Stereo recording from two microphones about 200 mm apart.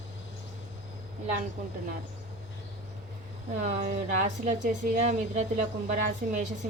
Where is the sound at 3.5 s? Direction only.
40° right (ahead or behind).